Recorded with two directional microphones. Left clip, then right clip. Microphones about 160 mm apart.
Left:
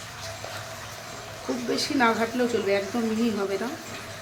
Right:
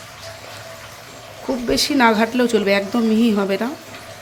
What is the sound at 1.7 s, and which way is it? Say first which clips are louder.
Speech: right 8 dB; 65° right (ahead or behind).